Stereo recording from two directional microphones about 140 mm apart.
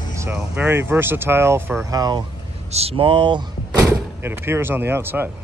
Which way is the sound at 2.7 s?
45° right (ahead or behind).